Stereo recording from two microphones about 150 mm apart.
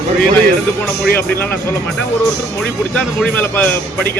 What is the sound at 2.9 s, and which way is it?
Speech, 5° left (ahead or behind).